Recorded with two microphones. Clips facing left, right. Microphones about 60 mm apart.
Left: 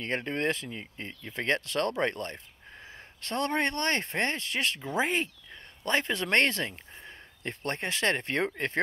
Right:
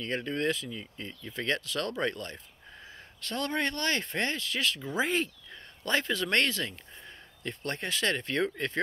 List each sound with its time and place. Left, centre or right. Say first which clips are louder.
0.0 s speech: left 1 dB; left